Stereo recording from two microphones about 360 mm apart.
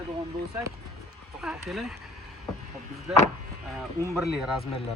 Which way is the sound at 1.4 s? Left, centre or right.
Centre.